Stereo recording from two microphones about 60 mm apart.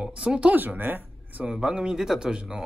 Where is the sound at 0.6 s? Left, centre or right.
Right.